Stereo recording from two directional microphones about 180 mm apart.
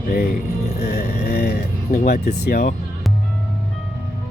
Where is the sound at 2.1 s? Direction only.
60° left (ahead or behind).